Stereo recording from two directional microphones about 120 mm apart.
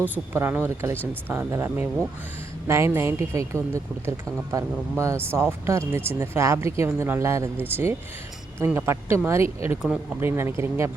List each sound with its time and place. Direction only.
0.1 s speech: 15° right (ahead or behind)